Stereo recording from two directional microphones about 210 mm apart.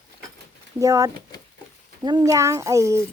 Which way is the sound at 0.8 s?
15° right (ahead or behind).